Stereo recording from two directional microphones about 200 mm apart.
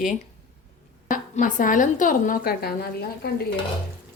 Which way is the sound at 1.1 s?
40° left (ahead or behind).